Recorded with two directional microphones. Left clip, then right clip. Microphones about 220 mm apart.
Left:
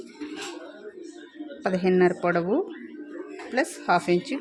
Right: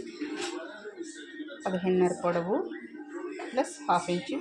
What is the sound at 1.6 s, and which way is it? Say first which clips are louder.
Speech: left 5 dB; 40° left (ahead or behind).